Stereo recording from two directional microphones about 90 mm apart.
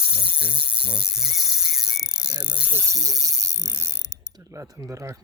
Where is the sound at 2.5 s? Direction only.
10° right (ahead or behind).